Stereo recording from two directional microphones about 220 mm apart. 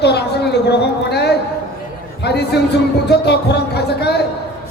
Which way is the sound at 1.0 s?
50° left (ahead or behind).